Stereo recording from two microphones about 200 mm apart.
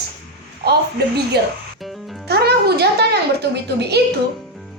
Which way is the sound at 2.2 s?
55° right (ahead or behind).